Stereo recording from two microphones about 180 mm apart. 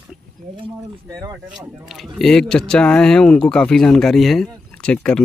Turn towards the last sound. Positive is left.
turn(degrees=5)  # may be behind; listen again after turning